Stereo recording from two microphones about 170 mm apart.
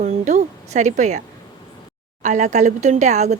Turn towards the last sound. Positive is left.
turn(degrees=-45)  # may be behind; listen again after turning